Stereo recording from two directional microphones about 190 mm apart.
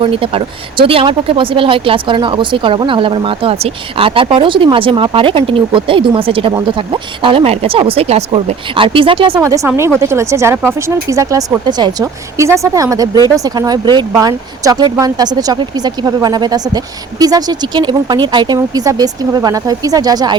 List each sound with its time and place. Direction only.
0.0 s speech: 30° right (ahead or behind)
9.4 s speech: 15° right (ahead or behind)